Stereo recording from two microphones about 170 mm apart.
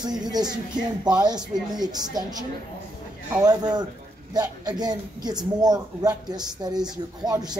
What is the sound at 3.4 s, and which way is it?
Speech, 25° right (ahead or behind).